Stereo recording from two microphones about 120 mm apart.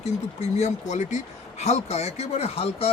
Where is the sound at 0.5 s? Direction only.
80° left.